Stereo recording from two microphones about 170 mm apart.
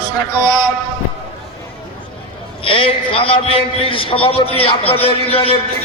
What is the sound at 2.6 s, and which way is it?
A man's voice, 30° left (ahead or behind).